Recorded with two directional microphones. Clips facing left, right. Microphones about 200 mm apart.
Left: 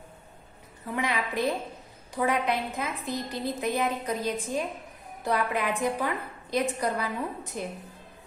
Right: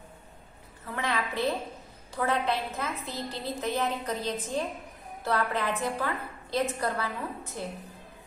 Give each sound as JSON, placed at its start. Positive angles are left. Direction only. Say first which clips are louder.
{"t": 0.9, "sound": "a woman's voice", "louder": "left 2 dB", "side_deg": 15}